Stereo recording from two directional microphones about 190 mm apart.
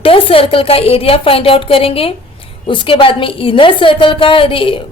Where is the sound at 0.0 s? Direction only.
30° left (ahead or behind).